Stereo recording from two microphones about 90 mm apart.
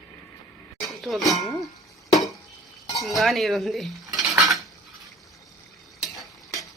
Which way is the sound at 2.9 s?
Centre (ahead or behind).